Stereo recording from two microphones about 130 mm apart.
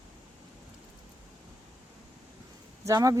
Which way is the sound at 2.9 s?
25° right (ahead or behind).